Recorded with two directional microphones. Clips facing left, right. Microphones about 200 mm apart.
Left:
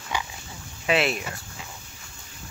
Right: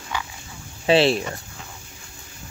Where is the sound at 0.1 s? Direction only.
15° left (ahead or behind).